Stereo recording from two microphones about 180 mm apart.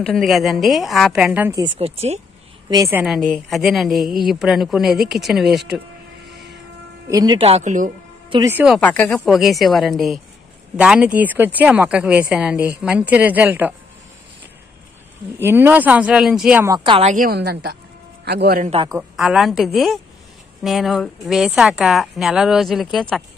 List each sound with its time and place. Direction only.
0.0 s a woman's voice: centre (ahead or behind)
1.8 s speech: 35° right (ahead or behind)
2.7 s speech: 20° right (ahead or behind)
3.0 s a woman's voice: centre (ahead or behind)
7.1 s speech: 20° right (ahead or behind)
7.4 s speech: 40° right (ahead or behind)
8.5 s speech: 10° right (ahead or behind)
8.7 s a woman's voice: 10° left (ahead or behind); by 13.7 s 10° right (ahead or behind)
15.3 s speech: 10° right (ahead or behind)
16.6 s speech: 25° right (ahead or behind)
17.0 s speech: 45° right (ahead or behind)
17.4 s a woman's voice: 65° right (ahead or behind)
18.6 s speech: 35° right (ahead or behind)
19.1 s a woman's voice: centre (ahead or behind)